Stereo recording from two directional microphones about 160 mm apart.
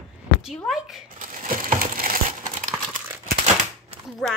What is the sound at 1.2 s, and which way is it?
Crumpling, 55° right (ahead or behind).